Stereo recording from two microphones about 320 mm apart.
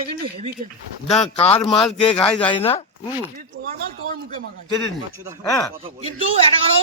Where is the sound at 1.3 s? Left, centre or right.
Centre.